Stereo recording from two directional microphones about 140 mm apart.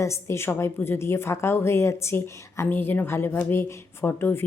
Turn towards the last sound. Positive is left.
turn(degrees=15)  # may be behind; listen again after turning